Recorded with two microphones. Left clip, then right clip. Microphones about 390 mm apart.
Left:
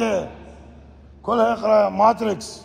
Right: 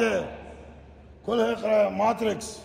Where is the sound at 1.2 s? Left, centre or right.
Centre.